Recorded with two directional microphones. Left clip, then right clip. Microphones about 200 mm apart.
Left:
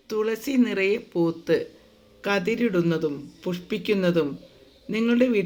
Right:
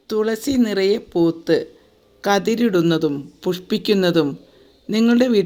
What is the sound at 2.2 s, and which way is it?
Speech, 35° right (ahead or behind).